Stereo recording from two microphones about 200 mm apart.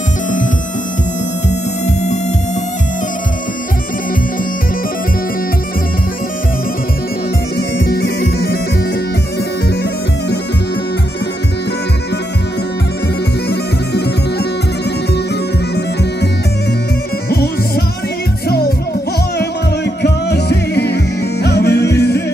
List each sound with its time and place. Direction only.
1.5 s music: 35° left (ahead or behind)
7.8 s music: 60° left (ahead or behind)
13.5 s bagpipes: 55° left (ahead or behind)
15.7 s music: 55° left (ahead or behind)
17.3 s music: 55° left (ahead or behind)
19.3 s music: 55° left (ahead or behind)